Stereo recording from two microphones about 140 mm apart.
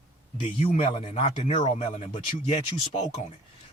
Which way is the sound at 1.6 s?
55° left (ahead or behind).